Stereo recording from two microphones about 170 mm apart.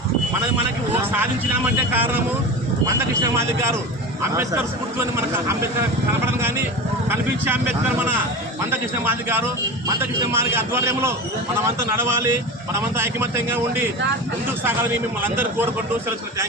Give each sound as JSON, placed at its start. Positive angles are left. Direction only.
{"t": 1.9, "sound": "a man's voice", "side_deg": -10}
{"t": 8.7, "sound": "a man's voice", "side_deg": -15}